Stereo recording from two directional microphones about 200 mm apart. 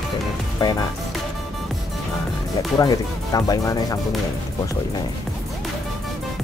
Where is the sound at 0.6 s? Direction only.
20° left (ahead or behind).